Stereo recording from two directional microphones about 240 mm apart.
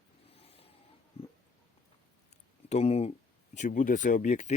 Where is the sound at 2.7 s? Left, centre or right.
Left.